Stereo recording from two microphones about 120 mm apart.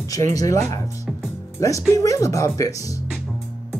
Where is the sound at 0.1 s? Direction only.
30° left (ahead or behind).